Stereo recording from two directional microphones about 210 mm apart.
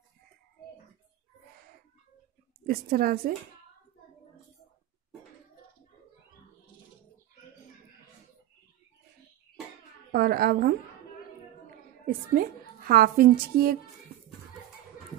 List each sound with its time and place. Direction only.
2.6 s speech: 45° right (ahead or behind)
10.1 s a sound: 45° right (ahead or behind)
12.4 s a woman's voice: 45° right (ahead or behind)